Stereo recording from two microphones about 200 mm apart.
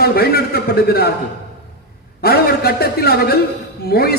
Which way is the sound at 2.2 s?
50° left (ahead or behind).